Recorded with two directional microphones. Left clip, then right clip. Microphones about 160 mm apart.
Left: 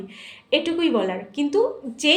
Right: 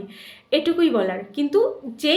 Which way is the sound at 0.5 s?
25° right (ahead or behind).